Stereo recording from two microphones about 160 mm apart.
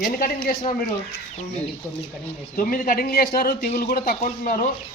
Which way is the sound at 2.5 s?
65° left (ahead or behind).